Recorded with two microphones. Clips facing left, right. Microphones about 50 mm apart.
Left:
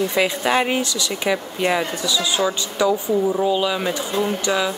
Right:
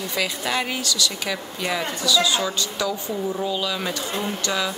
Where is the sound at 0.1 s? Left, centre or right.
Left.